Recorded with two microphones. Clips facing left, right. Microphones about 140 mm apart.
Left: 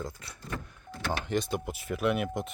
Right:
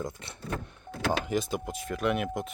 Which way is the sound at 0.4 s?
65° right (ahead or behind).